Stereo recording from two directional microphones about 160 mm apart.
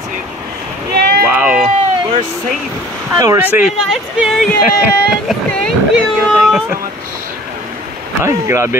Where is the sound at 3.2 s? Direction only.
15° right (ahead or behind).